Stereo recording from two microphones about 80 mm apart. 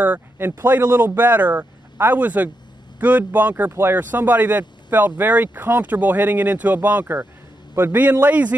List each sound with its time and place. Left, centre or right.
0.0 s speech: right